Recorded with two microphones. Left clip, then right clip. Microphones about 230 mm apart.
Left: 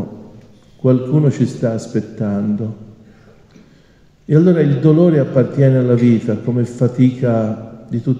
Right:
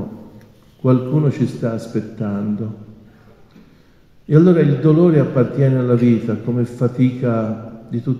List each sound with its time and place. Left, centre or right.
0.8 s a man's voice: left
4.3 s a man's voice: left